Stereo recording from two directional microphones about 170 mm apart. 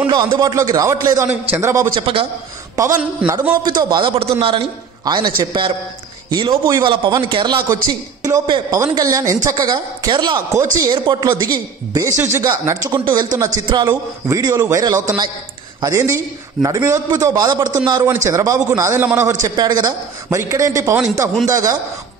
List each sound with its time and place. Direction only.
0.0 s speech: 30° right (ahead or behind)
2.0 s a man's voice: 30° right (ahead or behind)
2.7 s a man's voice: 15° right (ahead or behind)